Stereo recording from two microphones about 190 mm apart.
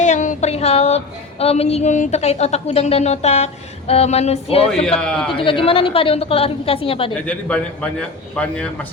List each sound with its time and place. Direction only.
0.0 s female singing: 40° left (ahead or behind)
4.7 s a man's voice: 5° left (ahead or behind)
5.3 s a woman's voice: 25° left (ahead or behind)
7.3 s a man's voice: 5° left (ahead or behind)